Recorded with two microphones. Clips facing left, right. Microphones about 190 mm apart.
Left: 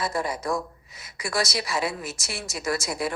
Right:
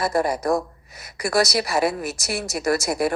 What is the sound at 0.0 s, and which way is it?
A woman's voice, 65° right (ahead or behind).